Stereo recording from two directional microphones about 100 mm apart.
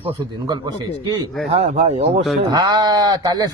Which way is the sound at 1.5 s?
90° right.